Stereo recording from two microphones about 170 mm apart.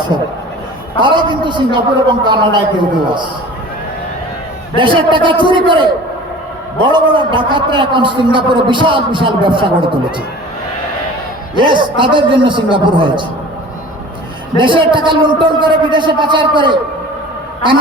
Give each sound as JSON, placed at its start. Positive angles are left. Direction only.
{"t": 0.9, "sound": "a man's voice", "side_deg": -30}
{"t": 4.8, "sound": "a man's voice", "side_deg": -30}
{"t": 11.5, "sound": "a man's voice", "side_deg": -25}
{"t": 14.5, "sound": "a man's voice", "side_deg": -30}